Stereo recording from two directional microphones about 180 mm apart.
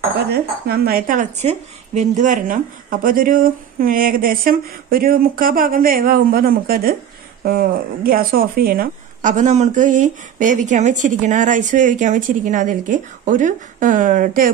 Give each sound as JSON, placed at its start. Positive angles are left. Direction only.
{"t": 0.3, "sound": "a woman's voice", "side_deg": -60}